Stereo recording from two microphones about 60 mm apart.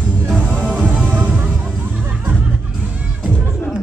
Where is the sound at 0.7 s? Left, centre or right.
Right.